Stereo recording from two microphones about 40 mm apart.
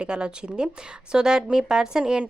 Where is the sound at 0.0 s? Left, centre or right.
Right.